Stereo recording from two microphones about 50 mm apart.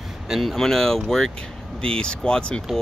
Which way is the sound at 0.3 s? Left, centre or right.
Centre.